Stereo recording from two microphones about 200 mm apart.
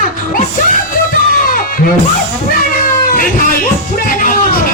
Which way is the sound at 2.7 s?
45° left (ahead or behind).